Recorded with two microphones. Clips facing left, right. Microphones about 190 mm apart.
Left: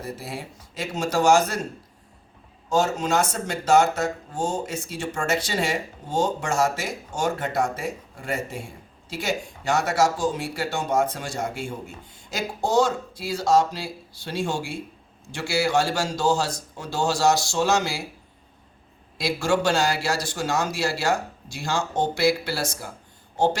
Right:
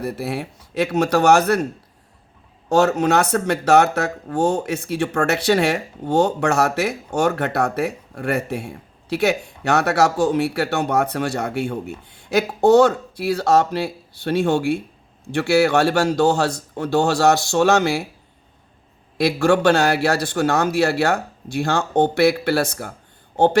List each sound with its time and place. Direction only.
0.0 s speech: 65° right (ahead or behind)
2.6 s speech: 65° right (ahead or behind)
19.1 s speech: 60° right (ahead or behind)